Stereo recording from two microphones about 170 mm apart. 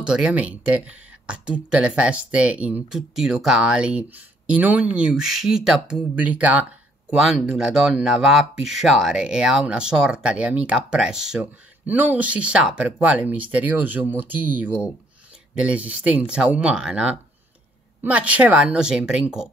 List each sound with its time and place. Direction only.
0.0 s speech: 5° right (ahead or behind)